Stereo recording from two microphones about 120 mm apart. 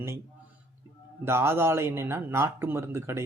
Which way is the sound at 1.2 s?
20° right (ahead or behind).